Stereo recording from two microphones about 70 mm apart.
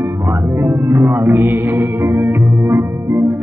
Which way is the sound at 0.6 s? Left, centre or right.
Right.